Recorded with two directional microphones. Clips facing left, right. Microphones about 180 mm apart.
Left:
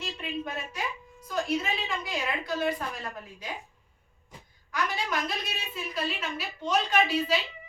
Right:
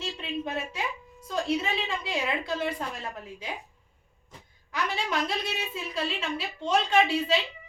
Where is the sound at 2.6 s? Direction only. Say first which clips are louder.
Left 1 dB; 25° right (ahead or behind).